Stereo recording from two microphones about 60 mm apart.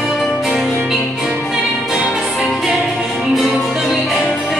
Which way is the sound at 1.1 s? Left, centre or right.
Centre.